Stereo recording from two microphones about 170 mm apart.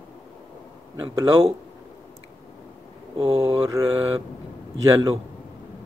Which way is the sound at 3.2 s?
30° right (ahead or behind).